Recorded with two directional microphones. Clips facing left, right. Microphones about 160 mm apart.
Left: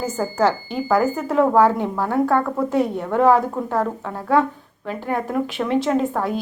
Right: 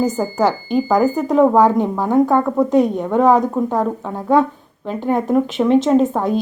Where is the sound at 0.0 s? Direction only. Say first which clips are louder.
Right 3 dB; 15° right (ahead or behind).